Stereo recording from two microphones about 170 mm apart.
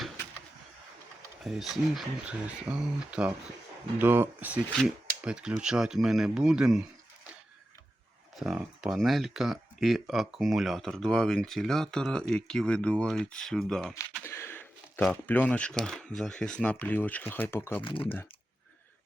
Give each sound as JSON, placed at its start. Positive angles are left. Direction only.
{"t": 1.5, "sound": "speech", "side_deg": 0}
{"t": 8.4, "sound": "speech", "side_deg": -5}
{"t": 14.3, "sound": "speech", "side_deg": 15}
{"t": 17.8, "sound": "speech", "side_deg": 30}